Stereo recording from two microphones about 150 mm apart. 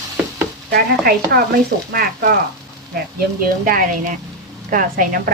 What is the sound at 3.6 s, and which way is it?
A woman's voice, 70° right (ahead or behind).